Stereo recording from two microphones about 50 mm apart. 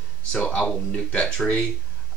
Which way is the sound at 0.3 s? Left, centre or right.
Centre.